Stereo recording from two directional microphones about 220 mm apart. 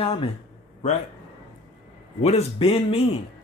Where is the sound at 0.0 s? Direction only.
25° left (ahead or behind).